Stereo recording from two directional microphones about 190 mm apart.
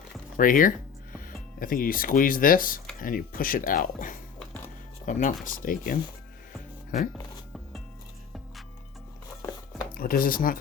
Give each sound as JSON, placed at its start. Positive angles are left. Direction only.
{"t": 0.3, "sound": "speech", "side_deg": 45}
{"t": 9.9, "sound": "speech", "side_deg": 50}